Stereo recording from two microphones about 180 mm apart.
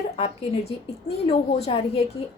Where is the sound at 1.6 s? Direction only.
35° left (ahead or behind).